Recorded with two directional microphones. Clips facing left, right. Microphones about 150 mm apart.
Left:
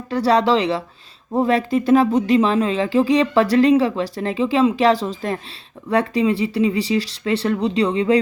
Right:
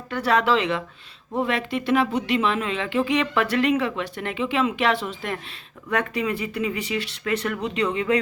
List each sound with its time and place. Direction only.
0.1 s speech: 35° left (ahead or behind)